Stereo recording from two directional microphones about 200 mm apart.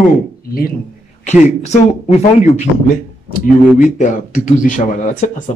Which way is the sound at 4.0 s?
40° left (ahead or behind).